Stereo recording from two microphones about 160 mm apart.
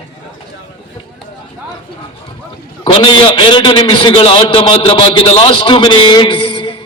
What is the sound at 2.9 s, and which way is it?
A man's voice, 30° left (ahead or behind).